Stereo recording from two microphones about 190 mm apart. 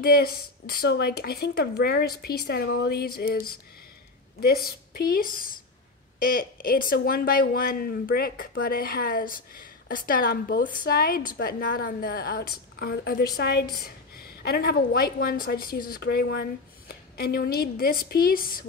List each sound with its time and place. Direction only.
0.0 s speech: 55° left (ahead or behind)